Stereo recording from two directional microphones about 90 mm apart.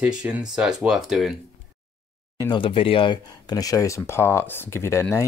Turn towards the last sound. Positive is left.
turn(degrees=30)  # may be behind; listen again after turning